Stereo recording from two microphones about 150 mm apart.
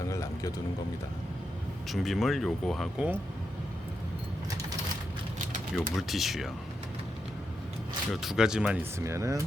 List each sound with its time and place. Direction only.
0.1 s a sound: 20° left (ahead or behind)
1.9 s speech: centre (ahead or behind)
5.7 s speech: centre (ahead or behind)
8.1 s speech: centre (ahead or behind)
9.0 s speech: 20° right (ahead or behind)